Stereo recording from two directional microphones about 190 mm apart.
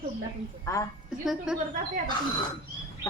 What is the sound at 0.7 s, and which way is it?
Speech, 15° left (ahead or behind).